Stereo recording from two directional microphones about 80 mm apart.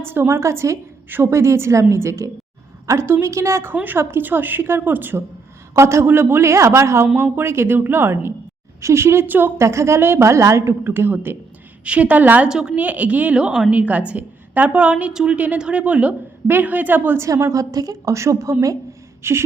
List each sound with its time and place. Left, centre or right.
0.0 s a woman's voice: right
5.7 s a woman's voice: right
9.6 s a woman's voice: right
12.5 s a woman's voice: centre
17.2 s a woman's voice: right